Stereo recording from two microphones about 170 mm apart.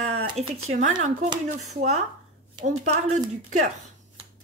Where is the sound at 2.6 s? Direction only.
45° right (ahead or behind).